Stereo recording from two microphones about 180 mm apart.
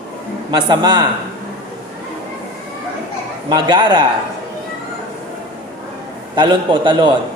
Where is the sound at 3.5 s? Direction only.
25° right (ahead or behind).